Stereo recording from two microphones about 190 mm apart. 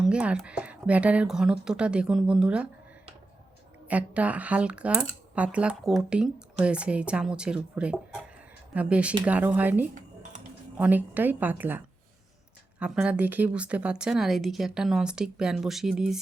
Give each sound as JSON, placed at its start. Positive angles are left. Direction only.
{"t": 0.0, "sound": "speech", "side_deg": -5}
{"t": 3.8, "sound": "speech", "side_deg": -5}
{"t": 12.8, "sound": "speech", "side_deg": -5}